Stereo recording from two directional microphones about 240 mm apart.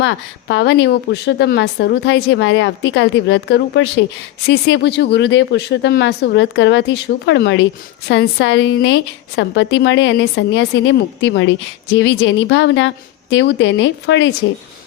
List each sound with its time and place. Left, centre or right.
0.0 s speech: left